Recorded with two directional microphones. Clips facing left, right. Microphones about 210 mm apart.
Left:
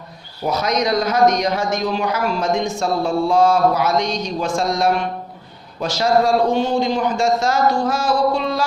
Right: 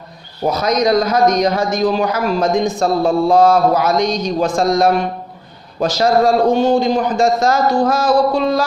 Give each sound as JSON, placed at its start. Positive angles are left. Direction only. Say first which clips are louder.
{"t": 0.4, "sound": "a man's voice", "louder": "right 4 dB", "side_deg": -35}